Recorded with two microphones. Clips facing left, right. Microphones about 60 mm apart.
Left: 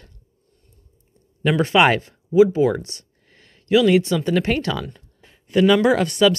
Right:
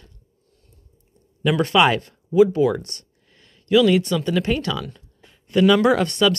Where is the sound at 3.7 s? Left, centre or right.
Left.